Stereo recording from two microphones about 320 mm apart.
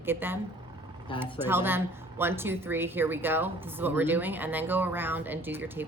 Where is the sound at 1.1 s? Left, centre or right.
Centre.